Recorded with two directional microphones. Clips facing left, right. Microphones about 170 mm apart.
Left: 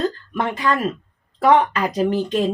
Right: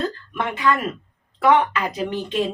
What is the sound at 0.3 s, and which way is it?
A woman's voice, 40° left (ahead or behind).